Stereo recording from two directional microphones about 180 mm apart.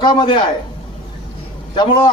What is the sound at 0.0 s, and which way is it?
Speech, 25° left (ahead or behind).